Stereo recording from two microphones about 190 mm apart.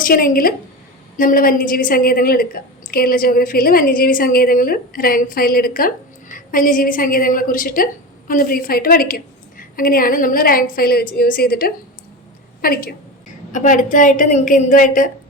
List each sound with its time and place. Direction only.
0.0 s a woman's voice: 50° left (ahead or behind)